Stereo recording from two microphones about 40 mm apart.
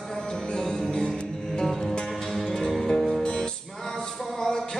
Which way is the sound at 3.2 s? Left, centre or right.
Left.